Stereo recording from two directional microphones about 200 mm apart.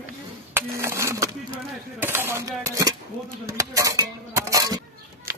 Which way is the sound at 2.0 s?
10° right (ahead or behind).